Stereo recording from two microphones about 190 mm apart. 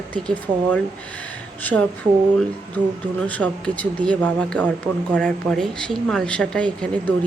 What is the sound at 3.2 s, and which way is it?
A woman's voice, 5° left (ahead or behind).